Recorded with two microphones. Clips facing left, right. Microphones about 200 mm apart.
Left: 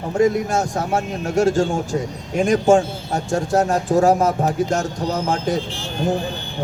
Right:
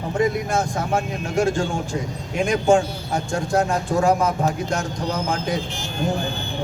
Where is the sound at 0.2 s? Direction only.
45° left (ahead or behind).